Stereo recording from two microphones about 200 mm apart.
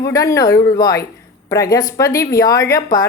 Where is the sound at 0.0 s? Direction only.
15° left (ahead or behind).